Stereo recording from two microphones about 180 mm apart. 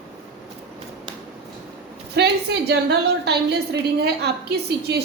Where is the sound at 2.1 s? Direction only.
65° right (ahead or behind).